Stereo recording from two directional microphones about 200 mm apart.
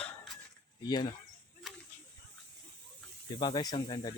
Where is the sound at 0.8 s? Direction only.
20° left (ahead or behind).